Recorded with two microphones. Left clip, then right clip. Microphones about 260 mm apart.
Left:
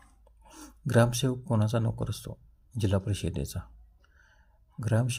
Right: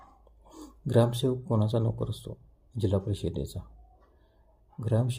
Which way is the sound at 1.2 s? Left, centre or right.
Left.